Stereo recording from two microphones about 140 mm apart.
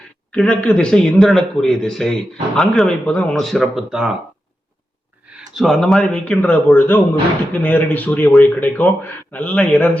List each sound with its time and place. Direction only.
0.3 s a man's voice: 10° left (ahead or behind)
5.3 s a man's voice: centre (ahead or behind)